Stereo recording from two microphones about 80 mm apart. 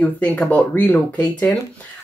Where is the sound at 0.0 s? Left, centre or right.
Centre.